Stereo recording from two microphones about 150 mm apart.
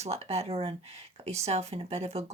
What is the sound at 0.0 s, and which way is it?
Speech, 45° right (ahead or behind).